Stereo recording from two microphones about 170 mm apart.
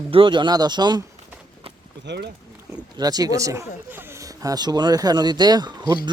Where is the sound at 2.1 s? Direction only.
90° right.